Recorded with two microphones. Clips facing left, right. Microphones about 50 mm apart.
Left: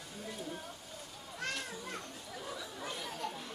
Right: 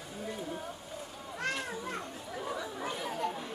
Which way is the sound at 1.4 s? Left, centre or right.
Centre.